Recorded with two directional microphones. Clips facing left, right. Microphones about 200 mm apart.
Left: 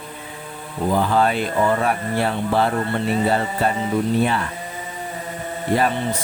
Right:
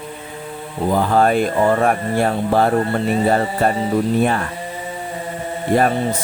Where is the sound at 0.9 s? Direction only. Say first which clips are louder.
Right 3 dB; 45° right (ahead or behind).